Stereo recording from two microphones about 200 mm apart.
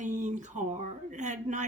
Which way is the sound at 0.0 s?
35° right (ahead or behind).